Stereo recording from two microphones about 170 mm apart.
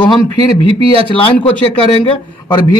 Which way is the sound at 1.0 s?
30° left (ahead or behind).